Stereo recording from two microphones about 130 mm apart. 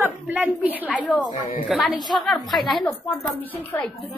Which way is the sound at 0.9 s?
10° left (ahead or behind).